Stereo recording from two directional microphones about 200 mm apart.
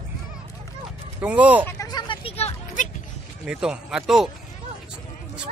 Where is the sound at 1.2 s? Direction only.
5° right (ahead or behind).